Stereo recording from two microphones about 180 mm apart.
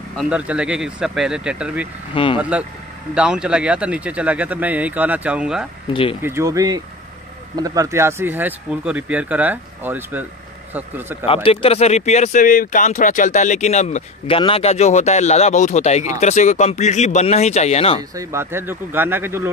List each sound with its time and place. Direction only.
0.2 s speech: 5° right (ahead or behind)
2.1 s speech: 30° left (ahead or behind)
2.5 s speech: 5° right (ahead or behind)
5.9 s speech: 30° left (ahead or behind)
6.2 s speech: 15° right (ahead or behind)
11.2 s speech: 30° left (ahead or behind)
18.1 s speech: 15° right (ahead or behind)